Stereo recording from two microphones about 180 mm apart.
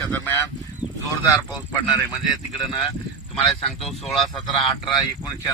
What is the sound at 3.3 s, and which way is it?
Speech, centre (ahead or behind).